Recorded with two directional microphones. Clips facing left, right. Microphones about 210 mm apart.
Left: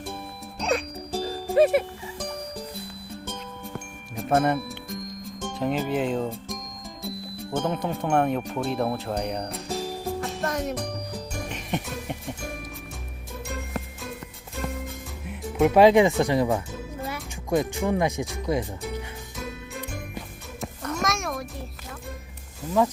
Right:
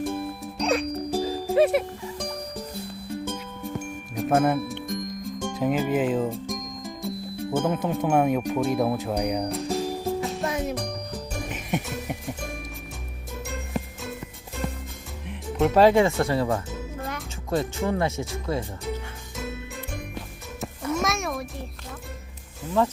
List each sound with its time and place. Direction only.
0.0 s music: 5° right (ahead or behind)
1.1 s music: 10° right (ahead or behind)
1.5 s speech: centre (ahead or behind)
3.2 s music: centre (ahead or behind)
5.5 s speech: 5° right (ahead or behind)
11.4 s music: 5° right (ahead or behind)
15.6 s speech: 15° left (ahead or behind)
17.0 s music: centre (ahead or behind)
17.5 s speech: 15° left (ahead or behind)
20.1 s music: centre (ahead or behind)